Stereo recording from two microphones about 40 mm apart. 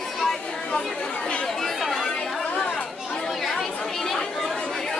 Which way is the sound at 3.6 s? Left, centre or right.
Centre.